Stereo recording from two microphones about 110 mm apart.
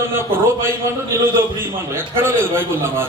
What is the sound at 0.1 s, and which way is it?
Speech, 20° right (ahead or behind).